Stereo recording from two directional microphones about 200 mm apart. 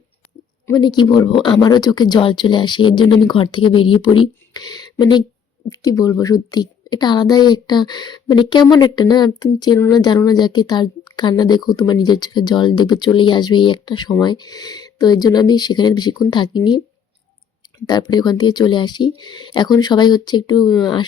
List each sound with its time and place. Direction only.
0.7 s a woman's voice: 20° left (ahead or behind)
17.8 s a woman's voice: 20° left (ahead or behind)